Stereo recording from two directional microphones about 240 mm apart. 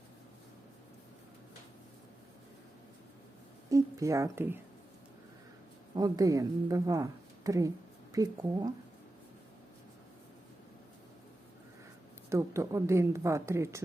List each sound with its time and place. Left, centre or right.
3.7 s a woman's voice: centre
5.9 s a woman's voice: centre
12.3 s a woman's voice: centre